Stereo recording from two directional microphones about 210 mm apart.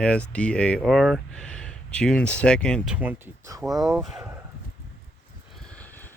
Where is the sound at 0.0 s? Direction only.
5° left (ahead or behind).